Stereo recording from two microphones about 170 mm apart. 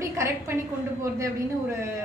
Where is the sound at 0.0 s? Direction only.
15° right (ahead or behind).